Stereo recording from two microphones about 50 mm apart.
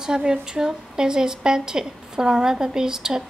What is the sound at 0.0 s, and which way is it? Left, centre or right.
A woman's voice, centre.